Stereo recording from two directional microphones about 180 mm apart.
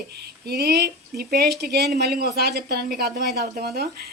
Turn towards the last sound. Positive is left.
turn(degrees=-55)  # may be behind; listen again after turning